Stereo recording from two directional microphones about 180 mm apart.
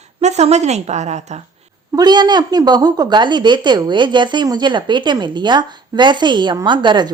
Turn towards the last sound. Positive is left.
turn(degrees=-25)  # may be behind; listen again after turning